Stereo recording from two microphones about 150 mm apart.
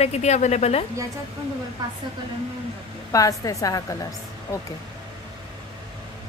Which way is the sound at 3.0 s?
20° left (ahead or behind).